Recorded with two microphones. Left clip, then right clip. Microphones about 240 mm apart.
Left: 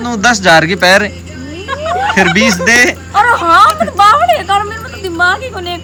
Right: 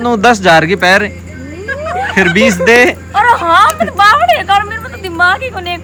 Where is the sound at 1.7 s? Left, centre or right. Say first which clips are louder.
Left 3 dB; left.